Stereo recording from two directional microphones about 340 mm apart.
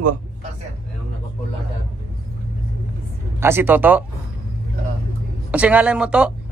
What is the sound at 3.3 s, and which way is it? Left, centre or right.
Speech, centre.